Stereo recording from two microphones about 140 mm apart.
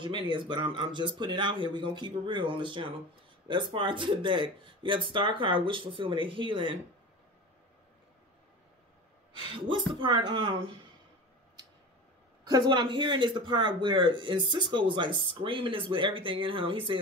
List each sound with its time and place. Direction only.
0.0 s speech: 35° right (ahead or behind)
9.3 s speech: 35° right (ahead or behind)
12.4 s speech: 30° right (ahead or behind)